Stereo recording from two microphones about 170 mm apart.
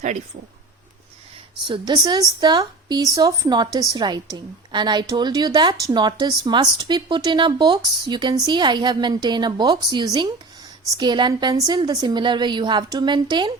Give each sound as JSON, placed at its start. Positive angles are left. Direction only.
{"t": 1.6, "sound": "a woman's voice", "side_deg": -25}